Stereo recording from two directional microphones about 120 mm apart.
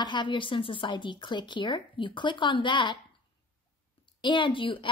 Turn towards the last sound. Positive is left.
turn(degrees=45)  # may be behind; listen again after turning